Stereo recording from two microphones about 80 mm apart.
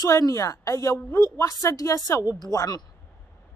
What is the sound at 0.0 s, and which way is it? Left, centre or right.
A woman's voice, left.